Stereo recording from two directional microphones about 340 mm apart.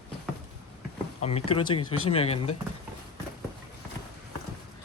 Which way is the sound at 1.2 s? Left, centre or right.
Centre.